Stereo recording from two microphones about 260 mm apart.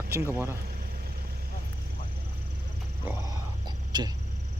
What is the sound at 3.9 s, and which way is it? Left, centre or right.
Speech, centre.